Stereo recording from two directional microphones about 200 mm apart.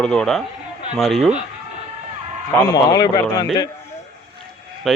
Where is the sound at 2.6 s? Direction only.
20° left (ahead or behind).